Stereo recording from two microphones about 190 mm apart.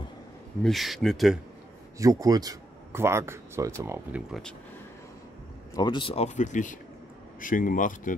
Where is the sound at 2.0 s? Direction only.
20° right (ahead or behind).